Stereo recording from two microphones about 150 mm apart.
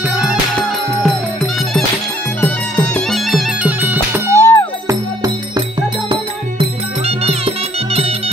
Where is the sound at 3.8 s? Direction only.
15° right (ahead or behind).